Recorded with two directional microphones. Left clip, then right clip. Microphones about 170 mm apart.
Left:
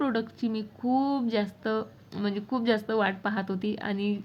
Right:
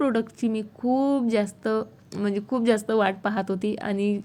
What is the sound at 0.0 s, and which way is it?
A woman's voice, 25° right (ahead or behind).